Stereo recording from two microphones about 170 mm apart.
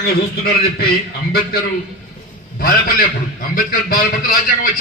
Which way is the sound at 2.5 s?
60° left (ahead or behind).